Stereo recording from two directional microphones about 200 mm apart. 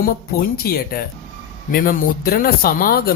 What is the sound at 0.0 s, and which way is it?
Speech, 45° left (ahead or behind).